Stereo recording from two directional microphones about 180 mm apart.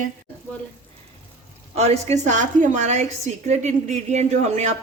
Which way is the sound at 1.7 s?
35° right (ahead or behind).